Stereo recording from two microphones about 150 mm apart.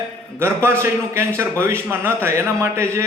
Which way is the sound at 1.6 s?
15° right (ahead or behind).